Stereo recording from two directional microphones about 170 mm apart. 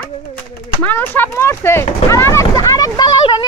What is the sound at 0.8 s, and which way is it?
Speech, 10° left (ahead or behind).